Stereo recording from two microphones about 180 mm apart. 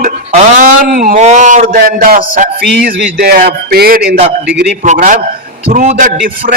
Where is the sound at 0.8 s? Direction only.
50° right (ahead or behind).